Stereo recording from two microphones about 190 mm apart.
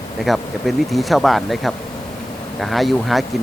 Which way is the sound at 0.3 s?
Centre (ahead or behind).